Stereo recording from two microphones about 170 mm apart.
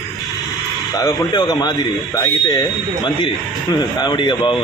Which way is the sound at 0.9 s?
20° left (ahead or behind).